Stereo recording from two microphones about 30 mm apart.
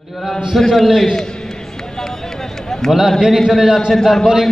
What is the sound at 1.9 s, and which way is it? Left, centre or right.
Run, centre.